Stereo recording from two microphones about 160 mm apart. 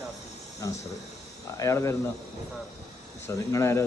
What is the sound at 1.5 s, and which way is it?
Speech, 20° left (ahead or behind).